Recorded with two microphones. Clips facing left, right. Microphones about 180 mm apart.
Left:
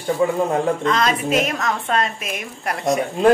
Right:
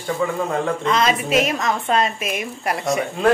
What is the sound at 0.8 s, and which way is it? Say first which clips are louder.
A man's voice: even; 5° right (ahead or behind).